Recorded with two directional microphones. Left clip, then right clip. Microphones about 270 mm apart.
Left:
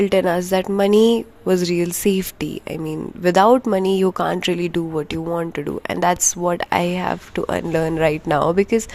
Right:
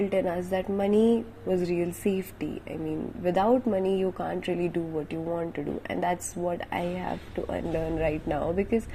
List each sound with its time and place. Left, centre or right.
0.0 s speech: left